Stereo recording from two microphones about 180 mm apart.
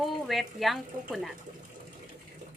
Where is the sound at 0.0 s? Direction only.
Centre (ahead or behind).